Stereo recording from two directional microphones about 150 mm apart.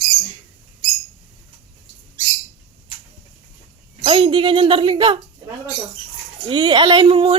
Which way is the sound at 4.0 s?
35° right (ahead or behind).